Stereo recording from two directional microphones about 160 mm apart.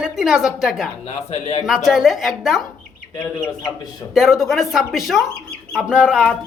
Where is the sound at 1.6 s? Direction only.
5° right (ahead or behind).